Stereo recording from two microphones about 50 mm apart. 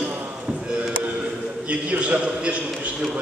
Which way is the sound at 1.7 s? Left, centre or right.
Right.